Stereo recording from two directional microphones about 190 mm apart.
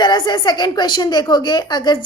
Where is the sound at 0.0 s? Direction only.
25° left (ahead or behind).